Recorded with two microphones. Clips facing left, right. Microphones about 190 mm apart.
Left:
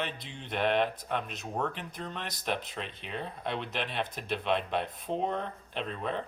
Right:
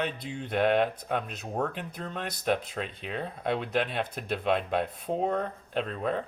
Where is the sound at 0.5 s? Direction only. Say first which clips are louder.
Right 3 dB; 50° right (ahead or behind).